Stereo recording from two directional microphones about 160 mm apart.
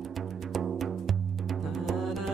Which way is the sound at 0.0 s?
Centre (ahead or behind).